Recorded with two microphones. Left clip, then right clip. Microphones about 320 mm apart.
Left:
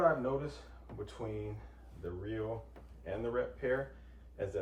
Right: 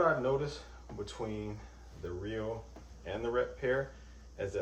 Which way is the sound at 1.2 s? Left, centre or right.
Centre.